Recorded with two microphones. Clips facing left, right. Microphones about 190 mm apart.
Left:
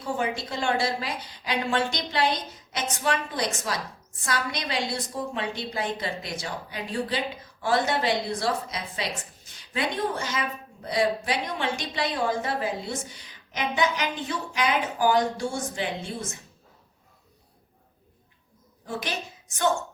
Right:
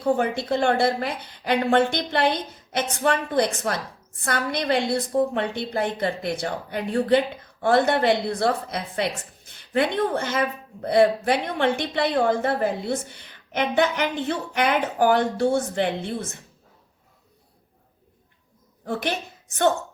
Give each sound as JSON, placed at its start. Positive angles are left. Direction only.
{"t": 0.0, "sound": "a woman's voice", "side_deg": -55}
{"t": 18.9, "sound": "a woman's voice", "side_deg": -60}